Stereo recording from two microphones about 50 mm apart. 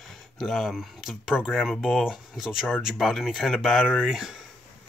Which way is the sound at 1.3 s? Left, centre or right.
Left.